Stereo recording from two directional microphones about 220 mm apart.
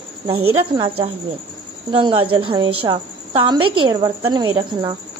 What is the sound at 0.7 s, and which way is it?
A woman's voice, 20° right (ahead or behind).